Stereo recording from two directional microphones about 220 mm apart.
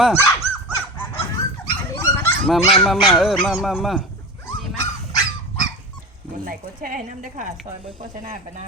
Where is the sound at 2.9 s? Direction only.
Centre (ahead or behind).